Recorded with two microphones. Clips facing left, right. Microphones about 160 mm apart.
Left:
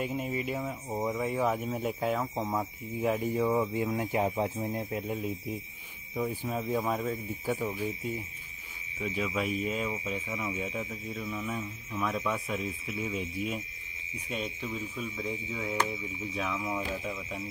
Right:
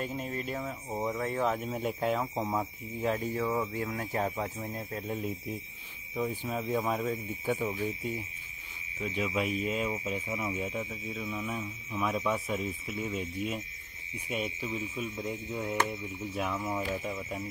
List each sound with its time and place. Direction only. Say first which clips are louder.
0.0 s speech: left 3 dB; 10° left (ahead or behind)
5.0 s speech: left 1 dB; 5° left (ahead or behind)
10.3 s speech: right 1 dB; 25° right (ahead or behind)
10.6 s speech: even; centre (ahead or behind)